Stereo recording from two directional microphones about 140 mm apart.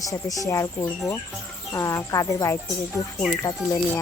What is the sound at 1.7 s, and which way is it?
Speech, 25° left (ahead or behind).